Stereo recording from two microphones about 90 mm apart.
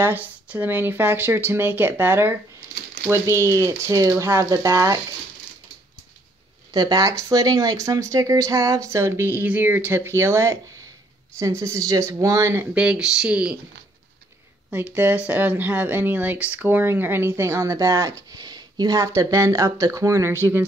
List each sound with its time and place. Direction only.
0.0 s speech: 20° right (ahead or behind); by 5.0 s 40° right (ahead or behind)
6.7 s speech: 45° right (ahead or behind)
12.7 s speech: 10° right (ahead or behind)
14.7 s speech: 15° right (ahead or behind)